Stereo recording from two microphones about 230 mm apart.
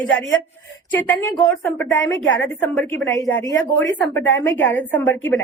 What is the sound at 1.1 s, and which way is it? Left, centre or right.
A woman's voice, centre.